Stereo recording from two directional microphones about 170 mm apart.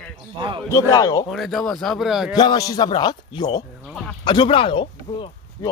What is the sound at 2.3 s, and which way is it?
A man's voice, 25° left (ahead or behind).